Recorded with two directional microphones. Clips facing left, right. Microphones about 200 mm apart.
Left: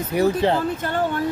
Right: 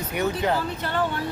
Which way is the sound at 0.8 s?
45° left (ahead or behind).